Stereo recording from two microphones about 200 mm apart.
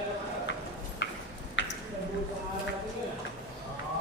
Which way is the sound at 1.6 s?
65° left (ahead or behind).